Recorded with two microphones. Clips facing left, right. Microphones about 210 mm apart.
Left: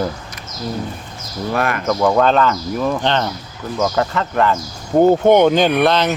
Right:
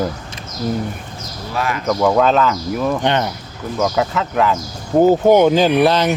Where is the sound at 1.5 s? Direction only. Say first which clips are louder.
Left 2 dB; 55° left (ahead or behind).